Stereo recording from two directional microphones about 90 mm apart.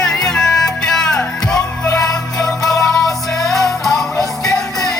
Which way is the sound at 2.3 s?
5° left (ahead or behind).